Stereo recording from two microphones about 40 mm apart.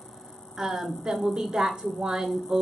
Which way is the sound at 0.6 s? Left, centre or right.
Centre.